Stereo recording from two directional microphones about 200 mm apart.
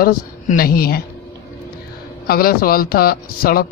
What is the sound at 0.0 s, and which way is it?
A man's voice, 45° left (ahead or behind).